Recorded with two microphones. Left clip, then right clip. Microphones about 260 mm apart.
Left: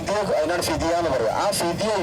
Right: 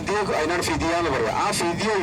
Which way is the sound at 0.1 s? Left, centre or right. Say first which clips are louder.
Left 1 dB; left.